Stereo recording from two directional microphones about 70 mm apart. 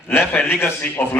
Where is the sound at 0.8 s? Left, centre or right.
Left.